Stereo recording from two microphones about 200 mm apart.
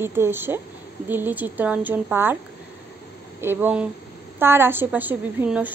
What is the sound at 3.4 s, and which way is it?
Speech, 10° right (ahead or behind).